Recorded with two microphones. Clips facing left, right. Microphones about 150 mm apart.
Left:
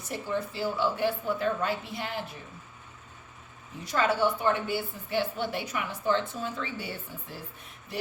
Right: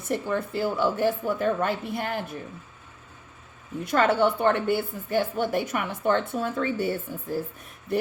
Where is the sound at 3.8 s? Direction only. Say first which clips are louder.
Right 5 dB; 60° right (ahead or behind).